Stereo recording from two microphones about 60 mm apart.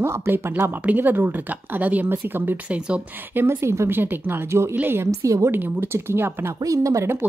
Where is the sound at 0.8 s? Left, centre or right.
Right.